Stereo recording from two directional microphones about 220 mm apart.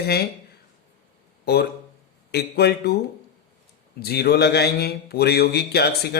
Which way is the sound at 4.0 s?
45° left (ahead or behind).